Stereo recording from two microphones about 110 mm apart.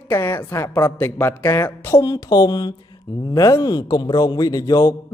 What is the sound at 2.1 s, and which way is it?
A man's voice, 35° left (ahead or behind).